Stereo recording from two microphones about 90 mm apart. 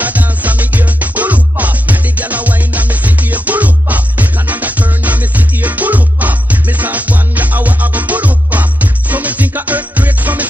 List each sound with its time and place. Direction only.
0.0 s music: 15° right (ahead or behind)